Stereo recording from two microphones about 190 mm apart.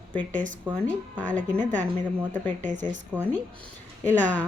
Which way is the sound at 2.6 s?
40° right (ahead or behind).